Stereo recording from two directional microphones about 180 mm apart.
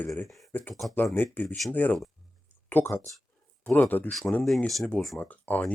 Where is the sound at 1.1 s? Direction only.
10° left (ahead or behind).